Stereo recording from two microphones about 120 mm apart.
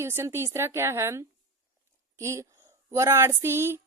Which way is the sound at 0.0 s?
20° right (ahead or behind).